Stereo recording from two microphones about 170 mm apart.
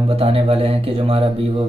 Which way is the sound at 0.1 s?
35° right (ahead or behind).